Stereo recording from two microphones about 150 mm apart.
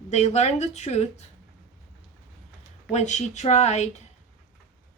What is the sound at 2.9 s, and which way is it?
A woman's voice, 50° left (ahead or behind).